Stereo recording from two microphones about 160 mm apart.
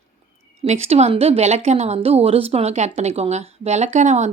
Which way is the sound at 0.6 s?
40° right (ahead or behind).